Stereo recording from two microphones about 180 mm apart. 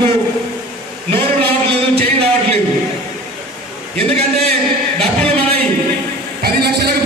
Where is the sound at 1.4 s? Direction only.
35° right (ahead or behind).